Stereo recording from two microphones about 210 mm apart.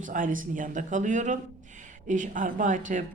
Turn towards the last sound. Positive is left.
turn(degrees=-35)  # may be behind; listen again after turning